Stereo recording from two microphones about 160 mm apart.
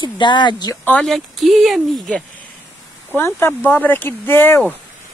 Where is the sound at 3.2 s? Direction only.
15° left (ahead or behind).